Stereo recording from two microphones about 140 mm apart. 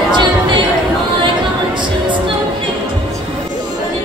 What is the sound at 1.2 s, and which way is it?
Music, 35° right (ahead or behind).